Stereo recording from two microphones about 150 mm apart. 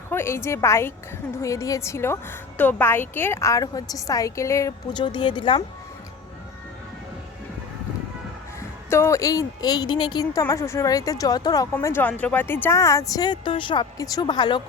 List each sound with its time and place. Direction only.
0.1 s a woman's voice: 15° left (ahead or behind); by 5.6 s 30° left (ahead or behind)
8.9 s a woman's voice: 20° left (ahead or behind)